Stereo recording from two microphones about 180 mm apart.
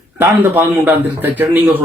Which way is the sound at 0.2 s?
10° right (ahead or behind).